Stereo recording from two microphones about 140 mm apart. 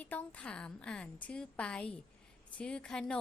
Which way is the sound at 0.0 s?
10° left (ahead or behind).